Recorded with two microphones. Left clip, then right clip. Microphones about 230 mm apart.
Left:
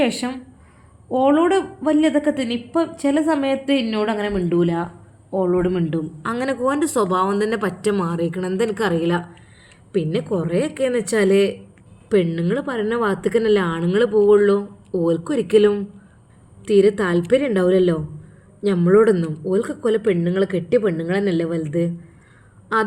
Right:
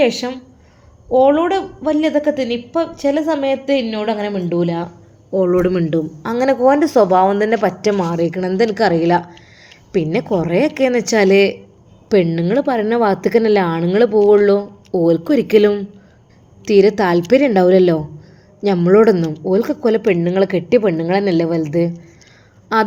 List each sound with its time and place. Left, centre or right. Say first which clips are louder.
0.0 s a woman's voice: right 5 dB; centre